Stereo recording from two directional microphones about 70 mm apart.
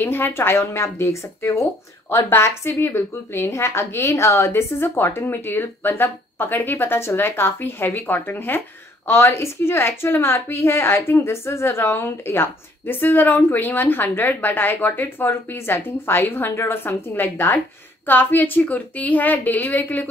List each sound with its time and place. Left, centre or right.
0.0 s a woman's voice: left